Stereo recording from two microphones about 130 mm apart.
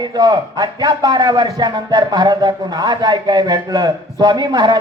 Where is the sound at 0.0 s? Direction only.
35° right (ahead or behind).